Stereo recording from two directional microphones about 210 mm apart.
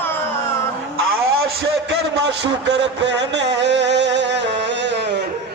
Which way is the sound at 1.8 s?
55° right (ahead or behind).